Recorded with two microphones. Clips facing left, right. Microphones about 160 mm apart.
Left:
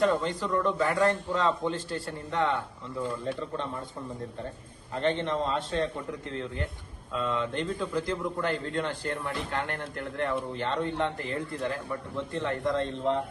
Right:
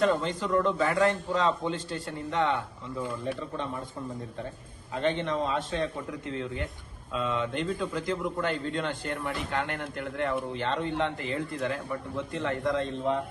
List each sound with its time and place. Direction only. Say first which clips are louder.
0.1 s a man's voice: right 1 dB; 20° right (ahead or behind)
4.9 s a man's voice: even; 15° right (ahead or behind)